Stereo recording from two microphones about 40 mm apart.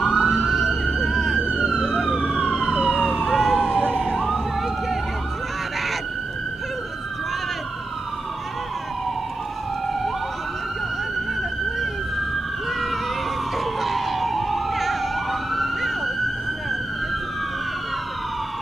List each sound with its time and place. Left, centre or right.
0.1 s emergency vehicle: centre
1.4 s police car: centre
1.8 s emergency vehicle: centre
2.1 s emergency vehicle: centre
2.9 s emergency vehicle: centre
13.7 s emergency vehicle: centre